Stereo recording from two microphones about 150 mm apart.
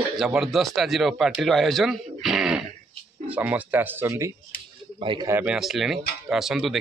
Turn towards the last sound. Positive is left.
turn(degrees=0)  # may be behind; listen again after turning